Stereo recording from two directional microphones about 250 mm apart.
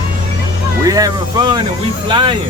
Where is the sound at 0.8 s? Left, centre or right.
Centre.